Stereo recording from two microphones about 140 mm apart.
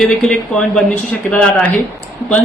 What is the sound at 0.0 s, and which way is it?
A man's voice, 5° left (ahead or behind).